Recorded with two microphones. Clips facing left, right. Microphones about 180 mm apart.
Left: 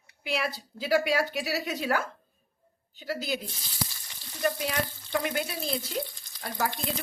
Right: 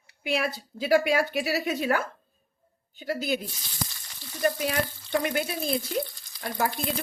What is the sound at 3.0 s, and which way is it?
Speech, 50° right (ahead or behind).